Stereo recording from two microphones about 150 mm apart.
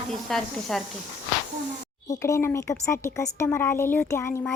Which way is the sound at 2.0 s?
20° left (ahead or behind).